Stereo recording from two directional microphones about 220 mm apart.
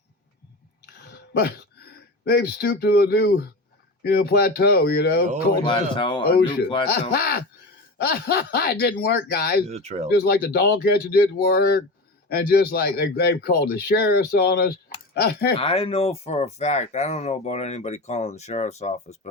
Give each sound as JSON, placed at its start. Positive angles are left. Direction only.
{"t": 0.9, "sound": "speech", "side_deg": 50}
{"t": 5.6, "sound": "speech", "side_deg": 20}
{"t": 7.1, "sound": "speech", "side_deg": 45}
{"t": 9.6, "sound": "speech", "side_deg": -30}
{"t": 10.2, "sound": "speech", "side_deg": 45}
{"t": 15.5, "sound": "speech", "side_deg": 25}